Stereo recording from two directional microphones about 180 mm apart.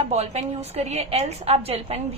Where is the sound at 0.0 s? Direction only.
35° right (ahead or behind).